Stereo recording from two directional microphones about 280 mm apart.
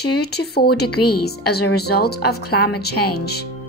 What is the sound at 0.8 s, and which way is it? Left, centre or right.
Speech, left.